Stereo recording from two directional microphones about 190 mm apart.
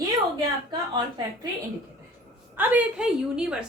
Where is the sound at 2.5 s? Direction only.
10° right (ahead or behind).